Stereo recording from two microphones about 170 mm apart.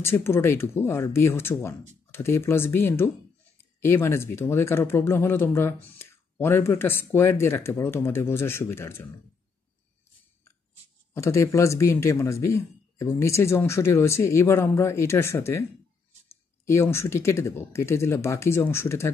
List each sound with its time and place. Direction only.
0.0 s speech: 15° left (ahead or behind)
11.1 s speech: 15° left (ahead or behind)
16.6 s speech: 15° left (ahead or behind)